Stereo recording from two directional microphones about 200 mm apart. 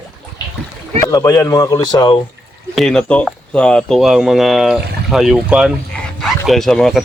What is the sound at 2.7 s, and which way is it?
Speech, 5° left (ahead or behind).